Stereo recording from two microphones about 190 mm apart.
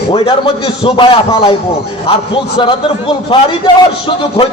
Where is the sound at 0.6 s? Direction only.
25° left (ahead or behind).